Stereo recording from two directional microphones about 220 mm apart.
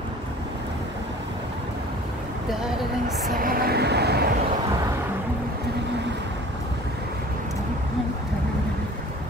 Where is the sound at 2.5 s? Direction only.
Centre (ahead or behind).